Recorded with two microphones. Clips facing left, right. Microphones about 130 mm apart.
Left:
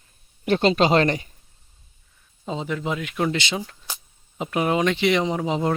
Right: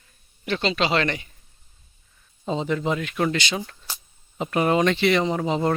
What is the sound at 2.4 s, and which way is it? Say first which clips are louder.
Speech: right 3 dB; 5° left (ahead or behind).